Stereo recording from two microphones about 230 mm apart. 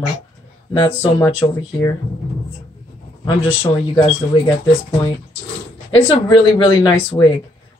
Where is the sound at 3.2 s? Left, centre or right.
Left.